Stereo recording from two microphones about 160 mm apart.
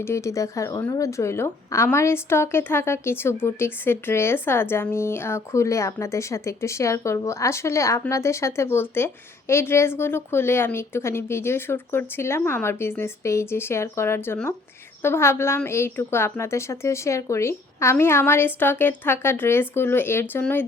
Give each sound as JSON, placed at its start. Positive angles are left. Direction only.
{"t": 0.0, "sound": "a woman's voice", "side_deg": 15}